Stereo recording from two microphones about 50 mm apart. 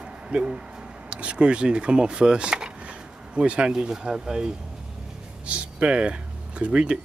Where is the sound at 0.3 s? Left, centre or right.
Centre.